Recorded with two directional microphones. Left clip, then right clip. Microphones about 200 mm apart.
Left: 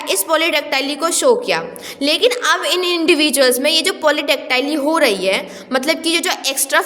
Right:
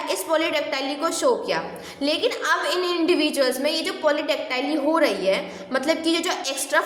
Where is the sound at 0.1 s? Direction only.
45° left (ahead or behind).